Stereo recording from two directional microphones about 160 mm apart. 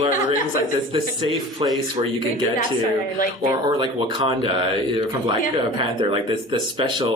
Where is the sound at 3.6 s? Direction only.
30° right (ahead or behind).